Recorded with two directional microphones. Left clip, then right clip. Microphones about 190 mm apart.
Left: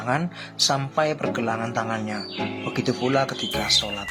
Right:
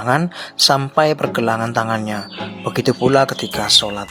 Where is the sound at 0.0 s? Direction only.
40° right (ahead or behind).